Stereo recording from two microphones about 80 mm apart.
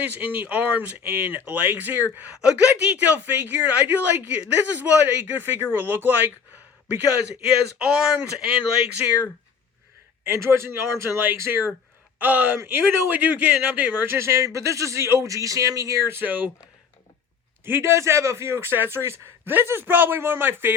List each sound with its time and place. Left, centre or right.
0.0 s a man's voice: right
7.8 s a man's voice: centre
10.2 s a man's voice: right
17.7 s a man's voice: right